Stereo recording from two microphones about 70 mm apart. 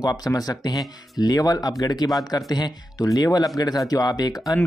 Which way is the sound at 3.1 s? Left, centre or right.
Left.